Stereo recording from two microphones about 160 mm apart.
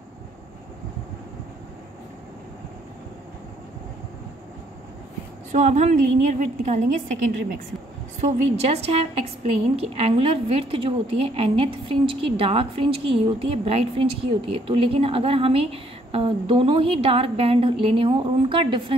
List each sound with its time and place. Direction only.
5.5 s a woman's voice: 50° right (ahead or behind)
8.2 s a woman's voice: 45° right (ahead or behind)